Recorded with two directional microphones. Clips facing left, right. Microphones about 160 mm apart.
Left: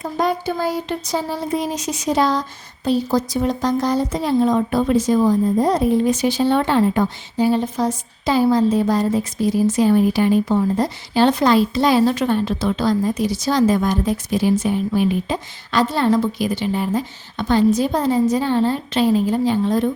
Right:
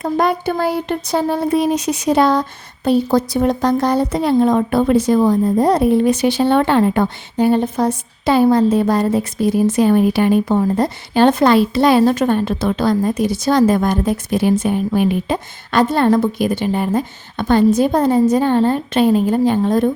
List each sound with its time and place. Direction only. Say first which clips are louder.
0.0 s a woman's voice: right 4 dB; 60° right (ahead or behind)